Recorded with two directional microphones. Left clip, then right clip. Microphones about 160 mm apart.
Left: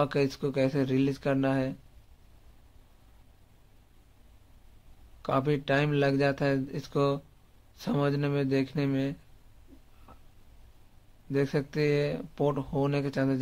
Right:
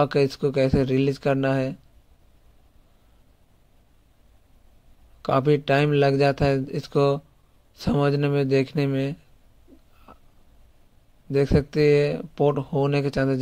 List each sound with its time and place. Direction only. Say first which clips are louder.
0.0 s speech: right 7 dB; 30° right (ahead or behind)
5.2 s speech: right 7 dB; 35° right (ahead or behind)
10.1 s a sound: right 6 dB; 35° right (ahead or behind)
11.3 s speech: right 8 dB; 30° right (ahead or behind)